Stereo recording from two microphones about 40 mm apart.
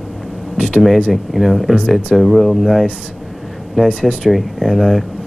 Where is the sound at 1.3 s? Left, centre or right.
Centre.